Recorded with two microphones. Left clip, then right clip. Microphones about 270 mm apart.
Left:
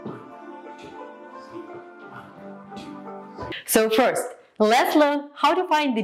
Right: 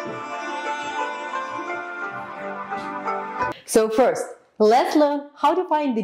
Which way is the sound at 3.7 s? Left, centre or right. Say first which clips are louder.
Right 1 dB; left.